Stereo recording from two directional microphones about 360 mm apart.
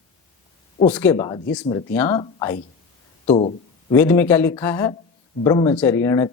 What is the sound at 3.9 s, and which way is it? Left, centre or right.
Speech, centre.